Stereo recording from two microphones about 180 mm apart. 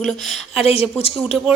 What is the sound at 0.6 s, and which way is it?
Speech, 35° left (ahead or behind).